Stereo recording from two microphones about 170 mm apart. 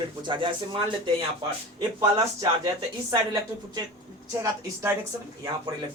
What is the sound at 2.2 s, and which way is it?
Speech, 20° right (ahead or behind).